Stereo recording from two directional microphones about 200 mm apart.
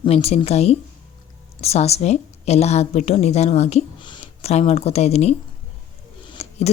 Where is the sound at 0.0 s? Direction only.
30° left (ahead or behind).